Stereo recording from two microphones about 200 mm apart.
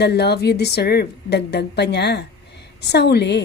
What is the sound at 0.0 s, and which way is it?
A woman's voice, 55° left (ahead or behind).